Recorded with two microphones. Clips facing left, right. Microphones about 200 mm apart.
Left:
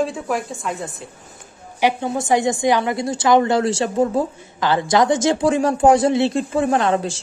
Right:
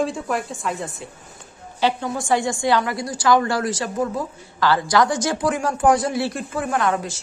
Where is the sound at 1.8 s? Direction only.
15° left (ahead or behind).